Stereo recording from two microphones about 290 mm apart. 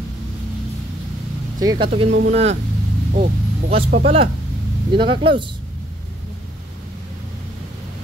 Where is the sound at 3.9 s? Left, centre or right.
Right.